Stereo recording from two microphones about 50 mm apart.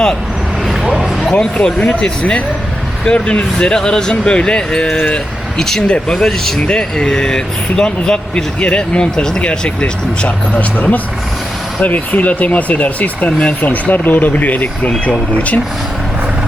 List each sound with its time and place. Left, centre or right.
0.7 s a sound: centre
1.2 s speech: left
5.5 s speech: centre; by 15.6 s left